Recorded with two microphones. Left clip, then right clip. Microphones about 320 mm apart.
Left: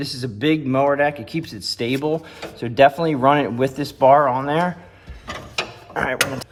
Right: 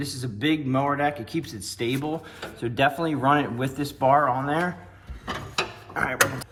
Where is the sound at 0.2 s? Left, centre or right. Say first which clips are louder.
Left 5 dB; left.